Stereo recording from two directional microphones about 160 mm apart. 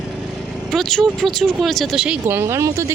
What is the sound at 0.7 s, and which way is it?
Speech, centre (ahead or behind).